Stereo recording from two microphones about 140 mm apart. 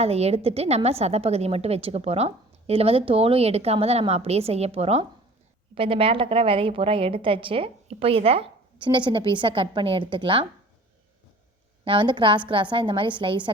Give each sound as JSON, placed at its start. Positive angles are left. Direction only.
{"t": 0.0, "sound": "a woman's voice", "side_deg": -50}
{"t": 11.9, "sound": "a woman's voice", "side_deg": -35}